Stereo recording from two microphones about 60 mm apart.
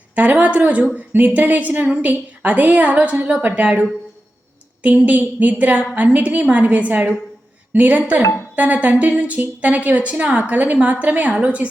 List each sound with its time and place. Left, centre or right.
0.2 s a woman's voice: right